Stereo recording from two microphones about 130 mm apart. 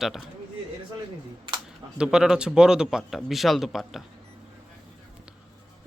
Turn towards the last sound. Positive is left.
turn(degrees=0)  # may be behind; listen again after turning